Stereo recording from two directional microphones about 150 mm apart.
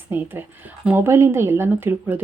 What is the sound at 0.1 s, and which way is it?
A woman's voice, 15° right (ahead or behind).